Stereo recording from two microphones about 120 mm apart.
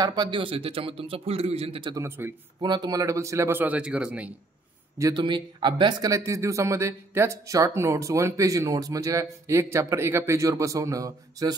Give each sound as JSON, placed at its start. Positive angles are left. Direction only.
{"t": 0.0, "sound": "a man's voice", "side_deg": -35}
{"t": 2.0, "sound": "speech", "side_deg": -20}
{"t": 2.6, "sound": "speech", "side_deg": -35}
{"t": 5.1, "sound": "speech", "side_deg": -40}